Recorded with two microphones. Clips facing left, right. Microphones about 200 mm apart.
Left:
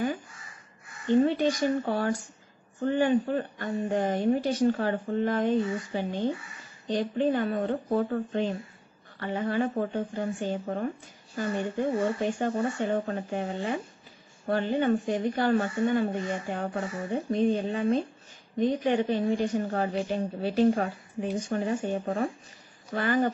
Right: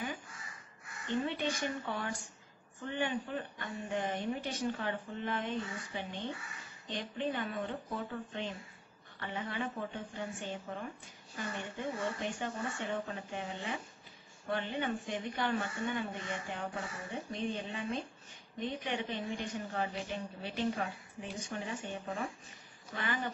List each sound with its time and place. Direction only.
1.1 s a woman's voice: 40° left (ahead or behind)